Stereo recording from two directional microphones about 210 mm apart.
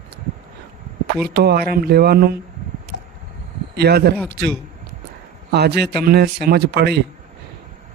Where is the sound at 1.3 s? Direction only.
50° right (ahead or behind).